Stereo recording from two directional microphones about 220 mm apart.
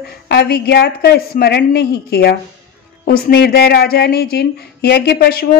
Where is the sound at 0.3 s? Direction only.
50° left (ahead or behind).